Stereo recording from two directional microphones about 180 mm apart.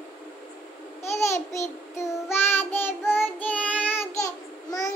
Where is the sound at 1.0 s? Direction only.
15° left (ahead or behind).